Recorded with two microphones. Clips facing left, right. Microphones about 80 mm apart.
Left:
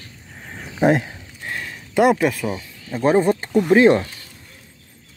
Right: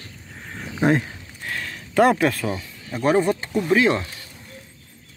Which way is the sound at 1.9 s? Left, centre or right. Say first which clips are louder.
Left 1 dB; centre.